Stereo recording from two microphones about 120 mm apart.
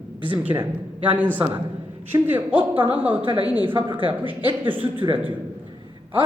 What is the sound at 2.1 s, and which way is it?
Speech, 15° right (ahead or behind).